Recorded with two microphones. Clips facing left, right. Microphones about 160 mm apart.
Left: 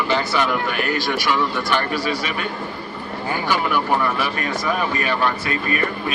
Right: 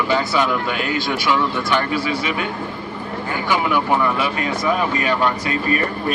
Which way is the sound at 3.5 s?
20° right (ahead or behind).